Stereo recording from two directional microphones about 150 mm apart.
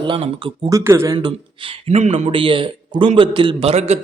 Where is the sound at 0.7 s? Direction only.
20° right (ahead or behind).